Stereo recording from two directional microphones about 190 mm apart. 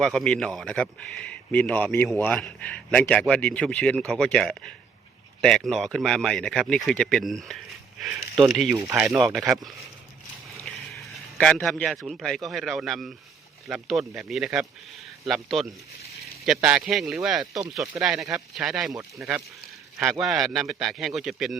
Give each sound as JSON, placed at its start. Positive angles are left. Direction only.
{"t": 0.0, "sound": "speech", "side_deg": 5}
{"t": 8.7, "sound": "speech", "side_deg": -15}
{"t": 9.0, "sound": "speech", "side_deg": 0}
{"t": 10.6, "sound": "a man's voice", "side_deg": 0}